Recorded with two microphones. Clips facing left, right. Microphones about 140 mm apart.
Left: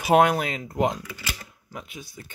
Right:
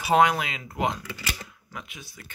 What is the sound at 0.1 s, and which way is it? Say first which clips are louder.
Speech: left 2 dB; 50° left (ahead or behind).